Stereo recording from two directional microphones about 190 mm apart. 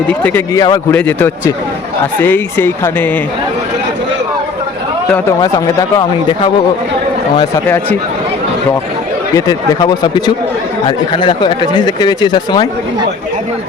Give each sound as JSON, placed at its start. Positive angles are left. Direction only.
{"t": 0.1, "sound": "speech", "side_deg": 10}
{"t": 5.4, "sound": "speech", "side_deg": 20}
{"t": 9.3, "sound": "speech", "side_deg": 20}